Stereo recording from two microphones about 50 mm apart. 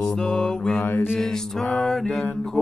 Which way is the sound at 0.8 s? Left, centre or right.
Left.